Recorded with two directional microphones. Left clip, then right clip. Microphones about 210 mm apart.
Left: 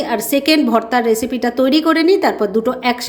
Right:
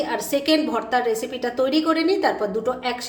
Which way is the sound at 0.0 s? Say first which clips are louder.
Left 6 dB; 35° left (ahead or behind).